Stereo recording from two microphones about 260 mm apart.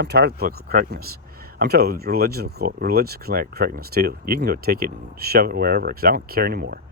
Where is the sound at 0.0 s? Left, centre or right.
Right.